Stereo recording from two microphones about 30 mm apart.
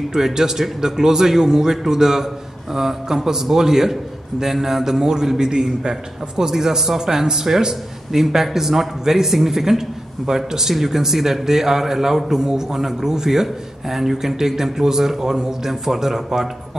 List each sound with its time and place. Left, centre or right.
0.1 s a man's voice: centre